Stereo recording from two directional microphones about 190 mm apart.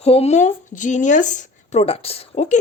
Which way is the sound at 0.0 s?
35° left (ahead or behind).